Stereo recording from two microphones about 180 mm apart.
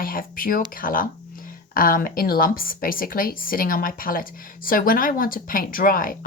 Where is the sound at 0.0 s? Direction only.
50° left (ahead or behind).